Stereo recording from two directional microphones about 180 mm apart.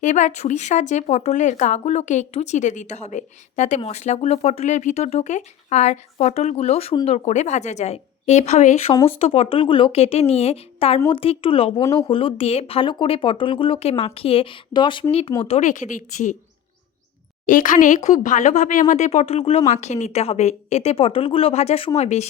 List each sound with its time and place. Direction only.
0.0 s speech: 40° left (ahead or behind); by 15.0 s 25° left (ahead or behind)
15.4 s a woman's voice: 40° left (ahead or behind)
17.4 s speech: 45° left (ahead or behind)